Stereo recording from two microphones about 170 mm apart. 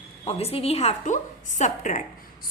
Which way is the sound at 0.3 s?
35° left (ahead or behind).